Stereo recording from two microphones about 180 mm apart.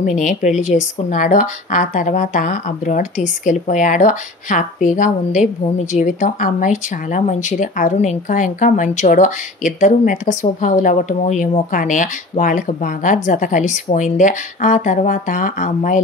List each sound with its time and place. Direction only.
0.0 s speech: 45° left (ahead or behind)